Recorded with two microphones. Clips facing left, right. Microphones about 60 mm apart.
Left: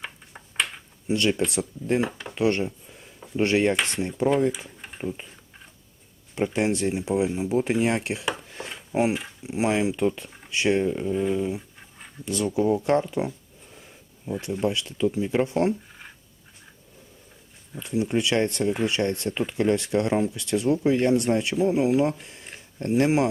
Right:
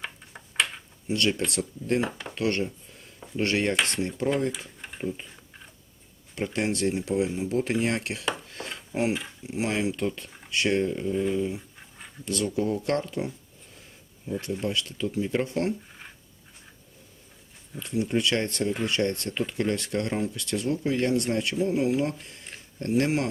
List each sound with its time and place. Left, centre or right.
0.0 s a sound: centre
1.0 s speech: centre
4.8 s a sound: centre
6.3 s speech: centre
14.6 s speech: left
17.7 s speech: centre